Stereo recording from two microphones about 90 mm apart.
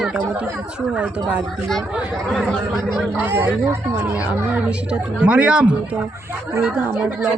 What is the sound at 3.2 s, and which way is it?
Speech, 25° right (ahead or behind).